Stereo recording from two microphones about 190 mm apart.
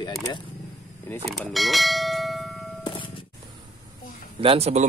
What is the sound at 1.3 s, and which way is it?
Bell, centre (ahead or behind).